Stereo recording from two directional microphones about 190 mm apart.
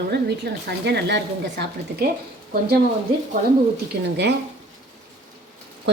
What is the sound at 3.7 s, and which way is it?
Speech, 60° right (ahead or behind).